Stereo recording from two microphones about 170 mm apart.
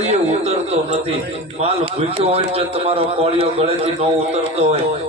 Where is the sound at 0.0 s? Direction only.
40° right (ahead or behind).